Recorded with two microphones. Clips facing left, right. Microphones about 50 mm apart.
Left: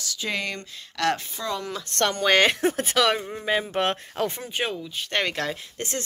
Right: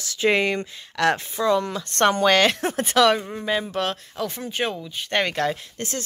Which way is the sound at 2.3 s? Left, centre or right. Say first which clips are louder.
Right 1 dB; centre.